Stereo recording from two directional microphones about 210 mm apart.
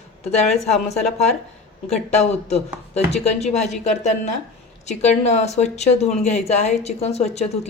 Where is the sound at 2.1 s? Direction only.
30° left (ahead or behind).